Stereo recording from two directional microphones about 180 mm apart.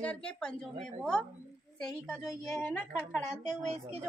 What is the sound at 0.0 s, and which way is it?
A woman's voice, 5° left (ahead or behind).